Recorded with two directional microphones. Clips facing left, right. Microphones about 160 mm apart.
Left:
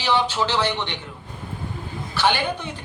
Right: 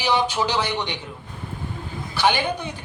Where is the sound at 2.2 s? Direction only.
15° right (ahead or behind).